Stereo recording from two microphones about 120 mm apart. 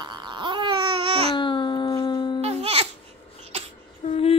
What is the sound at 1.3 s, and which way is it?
Babbling, 40° left (ahead or behind).